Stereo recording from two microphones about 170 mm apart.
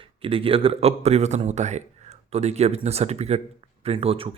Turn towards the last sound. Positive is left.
turn(degrees=-35)  # may be behind; listen again after turning